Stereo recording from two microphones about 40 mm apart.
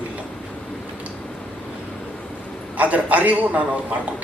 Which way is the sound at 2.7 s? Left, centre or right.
Right.